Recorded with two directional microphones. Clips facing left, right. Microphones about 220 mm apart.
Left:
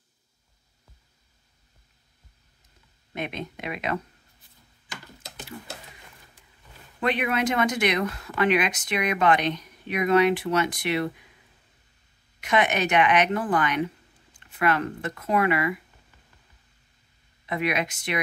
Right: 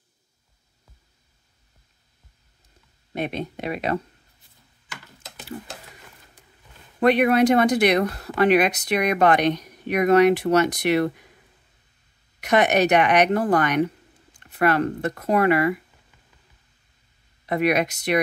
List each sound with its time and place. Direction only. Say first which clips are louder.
3.1 s speech: right 5 dB; 35° right (ahead or behind)
7.0 s speech: right 8 dB; 40° right (ahead or behind)
9.4 s speech: right 6 dB; 65° right (ahead or behind)
9.7 s speech: right 3 dB; 40° right (ahead or behind)
12.4 s speech: right 5 dB; 40° right (ahead or behind)
17.5 s speech: right 6 dB; 40° right (ahead or behind)